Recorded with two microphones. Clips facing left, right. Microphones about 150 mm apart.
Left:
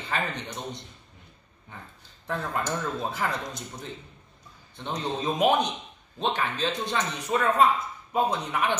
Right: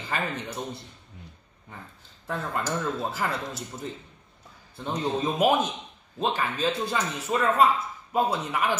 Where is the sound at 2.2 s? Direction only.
5° right (ahead or behind).